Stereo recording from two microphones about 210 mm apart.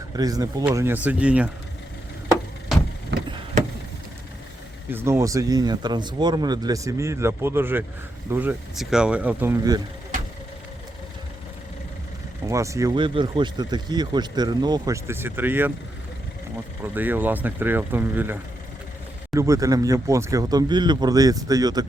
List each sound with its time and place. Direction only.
0.1 s speech: 15° right (ahead or behind)
2.7 s vehicle: centre (ahead or behind)
3.2 s vehicle: 25° right (ahead or behind)
4.9 s speech: 10° right (ahead or behind)
12.5 s speech: 15° right (ahead or behind)
16.8 s speech: 10° right (ahead or behind)